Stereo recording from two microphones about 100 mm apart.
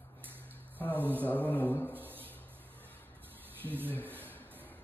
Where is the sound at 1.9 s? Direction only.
20° right (ahead or behind).